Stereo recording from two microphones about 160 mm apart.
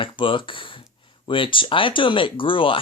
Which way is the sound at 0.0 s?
30° left (ahead or behind).